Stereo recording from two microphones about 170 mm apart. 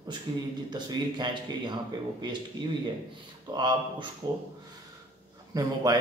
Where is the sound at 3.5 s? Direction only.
25° right (ahead or behind).